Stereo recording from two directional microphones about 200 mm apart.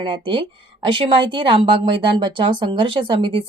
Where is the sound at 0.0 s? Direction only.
25° right (ahead or behind).